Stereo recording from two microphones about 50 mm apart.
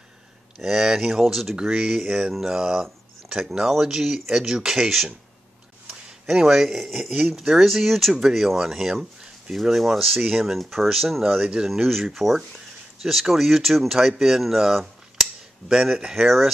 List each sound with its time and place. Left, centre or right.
0.6 s speech: centre